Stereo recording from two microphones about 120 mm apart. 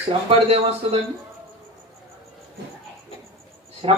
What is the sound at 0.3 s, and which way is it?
Speech, 55° right (ahead or behind).